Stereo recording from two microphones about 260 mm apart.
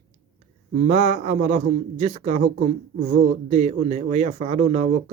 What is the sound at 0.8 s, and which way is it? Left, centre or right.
A man's voice, right.